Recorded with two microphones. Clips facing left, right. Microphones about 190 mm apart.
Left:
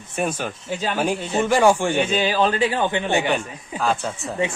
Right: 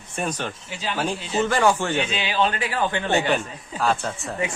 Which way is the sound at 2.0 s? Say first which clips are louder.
Left 4 dB; 45° left (ahead or behind).